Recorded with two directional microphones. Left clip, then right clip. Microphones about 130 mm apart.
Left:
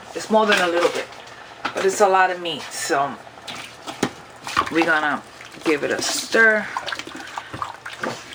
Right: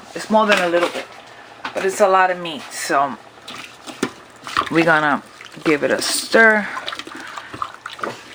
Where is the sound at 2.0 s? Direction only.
30° right (ahead or behind).